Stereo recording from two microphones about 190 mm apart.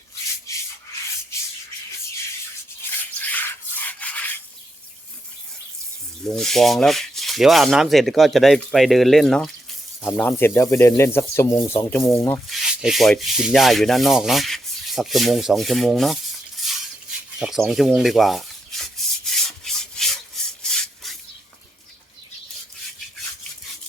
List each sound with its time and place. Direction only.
0.5 s rub: 15° left (ahead or behind)
3.2 s rub: 10° left (ahead or behind)
6.2 s rub: centre (ahead or behind)
10.0 s speech: 10° left (ahead or behind)
12.5 s rub: centre (ahead or behind)
16.6 s dishes: centre (ahead or behind)
17.4 s rub: centre (ahead or behind)